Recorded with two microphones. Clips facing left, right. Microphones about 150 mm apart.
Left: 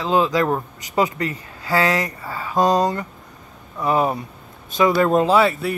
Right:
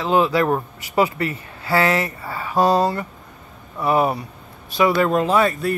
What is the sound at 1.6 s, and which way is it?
Speech, 30° right (ahead or behind).